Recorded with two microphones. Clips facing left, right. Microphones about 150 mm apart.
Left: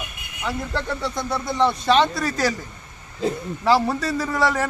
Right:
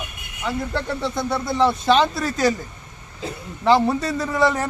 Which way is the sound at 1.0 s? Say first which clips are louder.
Right 2 dB; 5° right (ahead or behind).